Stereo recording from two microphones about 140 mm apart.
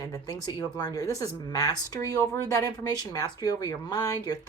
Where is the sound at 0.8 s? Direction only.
25° left (ahead or behind).